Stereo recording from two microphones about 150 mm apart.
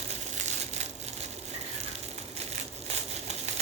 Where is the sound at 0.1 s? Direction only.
50° right (ahead or behind).